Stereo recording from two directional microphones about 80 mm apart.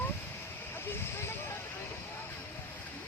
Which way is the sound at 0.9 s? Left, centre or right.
Left.